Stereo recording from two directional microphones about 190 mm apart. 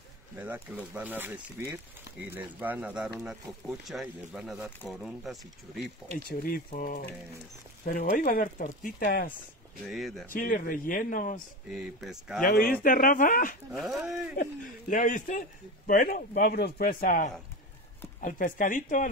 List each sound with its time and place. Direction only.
0.4 s speech: 10° right (ahead or behind)
6.2 s speech: 50° left (ahead or behind)
9.8 s speech: centre (ahead or behind)
10.3 s speech: 45° left (ahead or behind)
11.7 s speech: centre (ahead or behind)
12.4 s speech: 50° left (ahead or behind)
14.0 s speech: centre (ahead or behind)
14.3 s speech: 45° left (ahead or behind)